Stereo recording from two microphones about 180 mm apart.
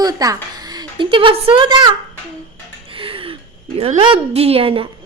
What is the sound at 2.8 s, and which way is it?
Gasp, 30° right (ahead or behind).